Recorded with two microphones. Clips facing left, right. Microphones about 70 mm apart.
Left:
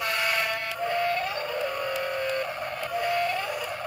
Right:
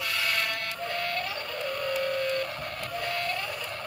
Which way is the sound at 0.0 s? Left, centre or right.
Left.